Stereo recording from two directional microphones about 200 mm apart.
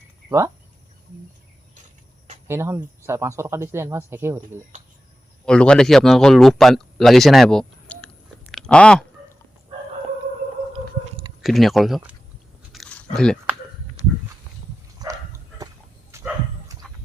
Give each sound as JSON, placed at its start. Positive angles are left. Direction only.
{"t": 0.3, "sound": "speech", "side_deg": -15}
{"t": 2.5, "sound": "speech", "side_deg": -10}
{"t": 5.5, "sound": "speech", "side_deg": 5}
{"t": 11.4, "sound": "speech", "side_deg": 0}
{"t": 12.7, "sound": "chewing", "side_deg": 0}
{"t": 13.1, "sound": "speech", "side_deg": 5}
{"t": 15.0, "sound": "dog", "side_deg": -20}